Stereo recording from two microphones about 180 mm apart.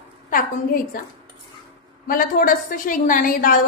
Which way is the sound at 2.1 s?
50° left (ahead or behind).